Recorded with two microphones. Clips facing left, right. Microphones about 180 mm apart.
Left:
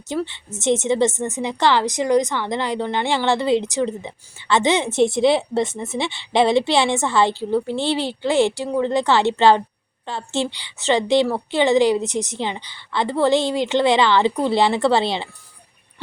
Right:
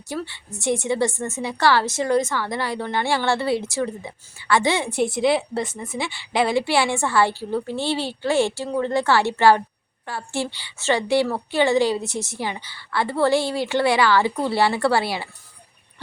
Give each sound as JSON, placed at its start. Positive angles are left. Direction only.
{"t": 0.1, "sound": "a woman's voice", "side_deg": 20}